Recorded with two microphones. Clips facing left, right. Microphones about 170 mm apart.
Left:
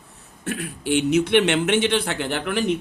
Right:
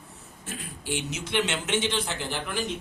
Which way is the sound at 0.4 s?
65° left (ahead or behind).